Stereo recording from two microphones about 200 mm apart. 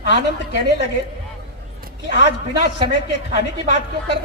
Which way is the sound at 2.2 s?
60° left (ahead or behind).